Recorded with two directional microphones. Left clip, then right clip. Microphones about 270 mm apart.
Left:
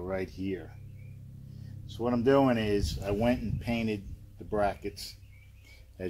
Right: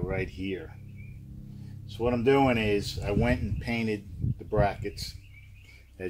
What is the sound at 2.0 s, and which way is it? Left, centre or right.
Speech, left.